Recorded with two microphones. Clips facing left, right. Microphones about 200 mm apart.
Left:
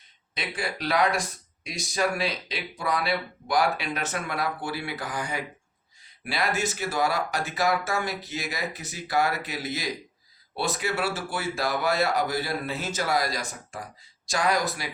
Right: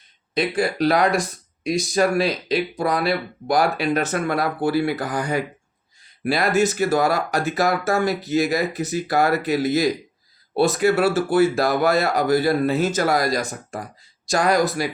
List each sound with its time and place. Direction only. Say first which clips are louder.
0.3 s speech: right 12 dB; 40° right (ahead or behind)